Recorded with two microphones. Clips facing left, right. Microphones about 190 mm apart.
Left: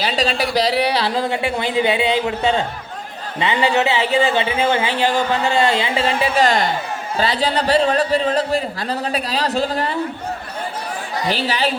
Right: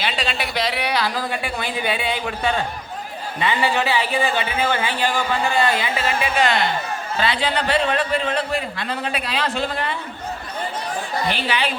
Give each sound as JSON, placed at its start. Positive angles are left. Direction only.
{"t": 0.0, "sound": "a man's voice", "side_deg": 40}
{"t": 11.3, "sound": "a man's voice", "side_deg": 40}